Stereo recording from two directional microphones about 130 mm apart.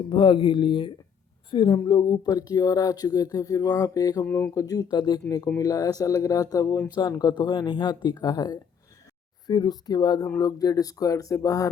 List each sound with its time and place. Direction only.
0.1 s speech: 40° left (ahead or behind)